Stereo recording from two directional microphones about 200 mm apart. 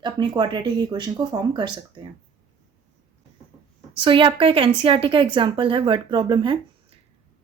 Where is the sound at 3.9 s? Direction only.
25° right (ahead or behind).